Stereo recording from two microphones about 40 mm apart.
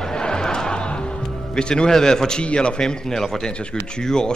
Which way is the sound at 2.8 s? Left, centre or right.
Centre.